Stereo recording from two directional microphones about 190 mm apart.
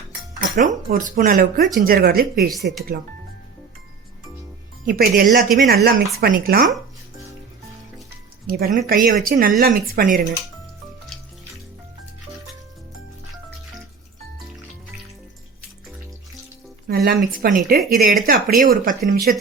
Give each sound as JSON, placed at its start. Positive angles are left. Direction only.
{"t": 0.3, "sound": "speech", "side_deg": -40}
{"t": 4.9, "sound": "speech", "side_deg": -45}
{"t": 8.4, "sound": "speech", "side_deg": -50}
{"t": 16.9, "sound": "speech", "side_deg": -55}